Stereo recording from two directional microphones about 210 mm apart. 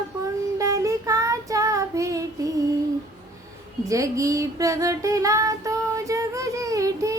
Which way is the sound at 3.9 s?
15° right (ahead or behind).